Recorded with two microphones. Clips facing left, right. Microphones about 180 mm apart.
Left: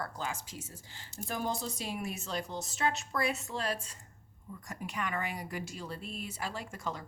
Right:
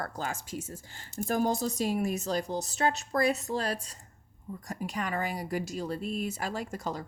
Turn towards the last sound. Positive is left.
turn(degrees=-40)  # may be behind; listen again after turning